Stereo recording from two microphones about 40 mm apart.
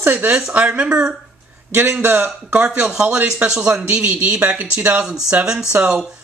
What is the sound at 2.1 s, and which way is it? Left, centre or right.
Speech, right.